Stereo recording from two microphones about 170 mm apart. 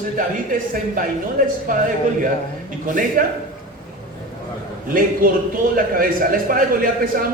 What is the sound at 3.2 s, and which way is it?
Speech, 55° right (ahead or behind).